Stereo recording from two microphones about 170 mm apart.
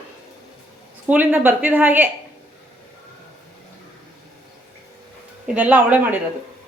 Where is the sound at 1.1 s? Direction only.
10° right (ahead or behind).